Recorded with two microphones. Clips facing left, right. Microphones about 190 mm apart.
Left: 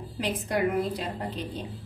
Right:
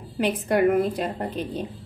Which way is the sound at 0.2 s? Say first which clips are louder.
Right 6 dB; 55° right (ahead or behind).